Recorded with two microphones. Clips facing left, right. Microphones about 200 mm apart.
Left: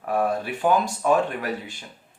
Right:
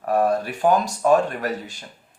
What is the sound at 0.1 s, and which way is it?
Speech, 40° right (ahead or behind).